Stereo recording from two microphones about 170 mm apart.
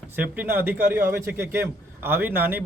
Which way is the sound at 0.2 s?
10° right (ahead or behind).